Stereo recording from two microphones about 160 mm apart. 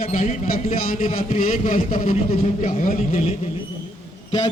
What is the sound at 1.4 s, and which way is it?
A man's voice, 60° left (ahead or behind).